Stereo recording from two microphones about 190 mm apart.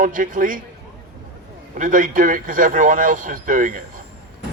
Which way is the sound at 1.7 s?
45° right (ahead or behind).